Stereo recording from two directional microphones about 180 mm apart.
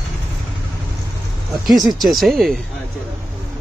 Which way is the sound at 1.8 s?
Centre (ahead or behind).